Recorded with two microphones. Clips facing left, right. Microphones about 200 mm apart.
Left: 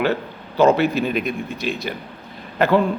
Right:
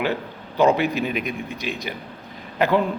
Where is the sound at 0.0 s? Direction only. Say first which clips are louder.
Left 4 dB; 15° right (ahead or behind).